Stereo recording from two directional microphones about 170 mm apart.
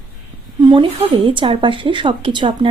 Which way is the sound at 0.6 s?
30° right (ahead or behind).